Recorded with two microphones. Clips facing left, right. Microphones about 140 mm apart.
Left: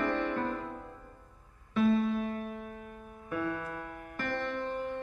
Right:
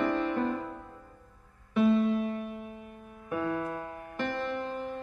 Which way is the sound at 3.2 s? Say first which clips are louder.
Right 2 dB; 20° right (ahead or behind).